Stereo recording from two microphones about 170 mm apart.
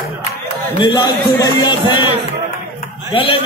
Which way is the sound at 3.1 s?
30° left (ahead or behind).